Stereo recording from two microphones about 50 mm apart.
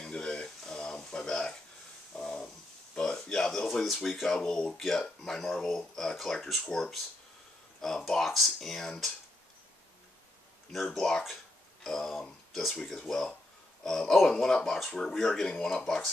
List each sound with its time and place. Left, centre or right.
0.0 s a sound: centre
3.8 s speech: centre
8.1 s speech: centre
10.9 s speech: centre